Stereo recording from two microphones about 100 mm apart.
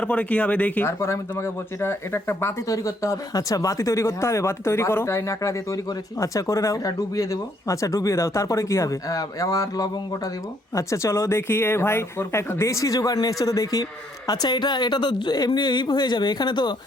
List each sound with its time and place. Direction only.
0.0 s speech: 15° left (ahead or behind)
0.9 s a woman's voice: 25° left (ahead or behind); by 16.7 s 50° left (ahead or behind)